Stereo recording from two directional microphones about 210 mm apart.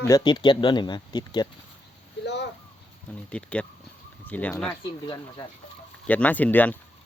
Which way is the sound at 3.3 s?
5° left (ahead or behind).